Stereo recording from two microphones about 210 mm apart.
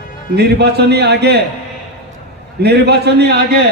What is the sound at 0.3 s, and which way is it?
A man's voice, 50° right (ahead or behind).